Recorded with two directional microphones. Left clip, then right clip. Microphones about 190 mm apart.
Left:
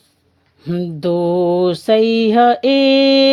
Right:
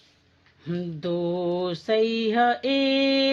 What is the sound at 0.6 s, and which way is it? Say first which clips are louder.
Mantra: left 11 dB; 30° left (ahead or behind).